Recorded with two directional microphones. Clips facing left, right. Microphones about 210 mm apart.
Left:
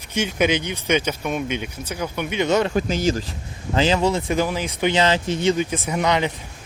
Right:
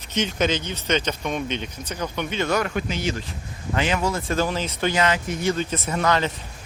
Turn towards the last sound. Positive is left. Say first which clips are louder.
# left 1 dB
turn(degrees=15)  # may be behind; listen again after turning